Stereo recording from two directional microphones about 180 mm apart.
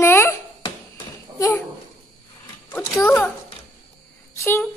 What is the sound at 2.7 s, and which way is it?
Speech, 20° left (ahead or behind).